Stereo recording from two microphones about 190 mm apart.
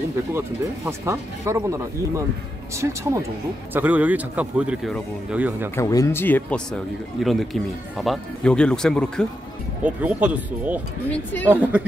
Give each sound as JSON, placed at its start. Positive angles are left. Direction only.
{"t": 0.3, "sound": "speech", "side_deg": -15}
{"t": 5.8, "sound": "speech", "side_deg": 15}
{"t": 9.8, "sound": "speech", "side_deg": -10}